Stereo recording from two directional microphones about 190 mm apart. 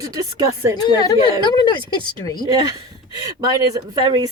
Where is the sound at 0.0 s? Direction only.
20° right (ahead or behind).